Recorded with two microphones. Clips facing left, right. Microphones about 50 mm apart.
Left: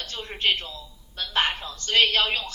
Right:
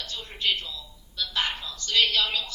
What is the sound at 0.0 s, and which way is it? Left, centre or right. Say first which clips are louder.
A man's voice: left 3 dB; left.